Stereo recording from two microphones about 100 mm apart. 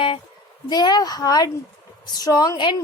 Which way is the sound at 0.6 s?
45° left (ahead or behind).